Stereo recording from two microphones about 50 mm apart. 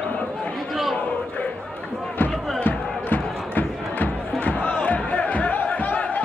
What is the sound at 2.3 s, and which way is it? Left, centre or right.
Music, centre.